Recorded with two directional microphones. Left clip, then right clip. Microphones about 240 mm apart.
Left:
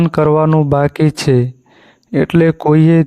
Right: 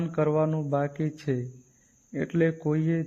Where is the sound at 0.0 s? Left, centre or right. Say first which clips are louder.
Left 13 dB; left.